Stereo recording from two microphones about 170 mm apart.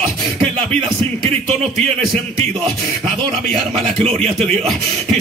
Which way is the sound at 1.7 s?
Centre (ahead or behind).